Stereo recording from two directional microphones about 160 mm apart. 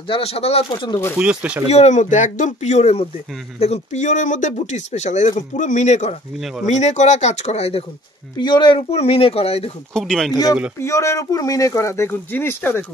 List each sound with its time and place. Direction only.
0.1 s speech: 40° left (ahead or behind)
1.1 s speech: 10° right (ahead or behind)
1.7 s speech: 45° left (ahead or behind)
8.4 s speech: 30° left (ahead or behind)
9.9 s speech: 5° left (ahead or behind)
10.8 s speech: 20° left (ahead or behind)